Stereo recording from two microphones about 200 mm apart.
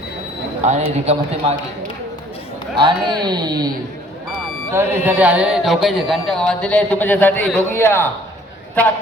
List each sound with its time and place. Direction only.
0.6 s a man's voice: 35° right (ahead or behind)
2.7 s speech: 25° right (ahead or behind)
4.7 s speech: 10° right (ahead or behind); by 8.1 s 10° left (ahead or behind)